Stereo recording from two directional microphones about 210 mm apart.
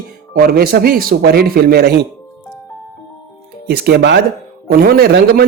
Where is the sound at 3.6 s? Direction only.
50° right (ahead or behind).